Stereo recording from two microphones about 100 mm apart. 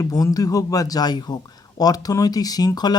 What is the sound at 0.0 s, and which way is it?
Speech, 35° left (ahead or behind).